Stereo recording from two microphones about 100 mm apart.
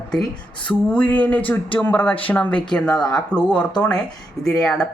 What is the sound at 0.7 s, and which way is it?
Speech, 15° left (ahead or behind).